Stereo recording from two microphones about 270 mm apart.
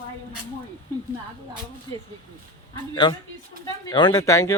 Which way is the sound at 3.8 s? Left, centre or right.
Centre.